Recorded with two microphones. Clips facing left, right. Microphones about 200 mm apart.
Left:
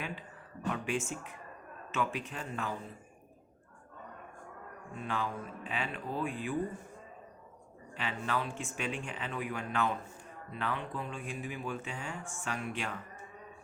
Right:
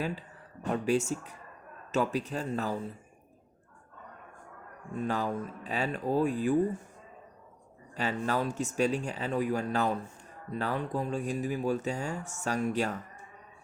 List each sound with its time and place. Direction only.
0.7 s speech: 40° right (ahead or behind)
4.9 s speech: 40° right (ahead or behind)
7.9 s speech: 40° right (ahead or behind)